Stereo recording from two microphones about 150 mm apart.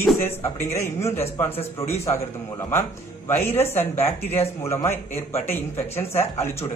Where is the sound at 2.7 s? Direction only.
15° left (ahead or behind).